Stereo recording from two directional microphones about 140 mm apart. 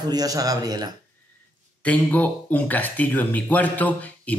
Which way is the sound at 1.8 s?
10° left (ahead or behind).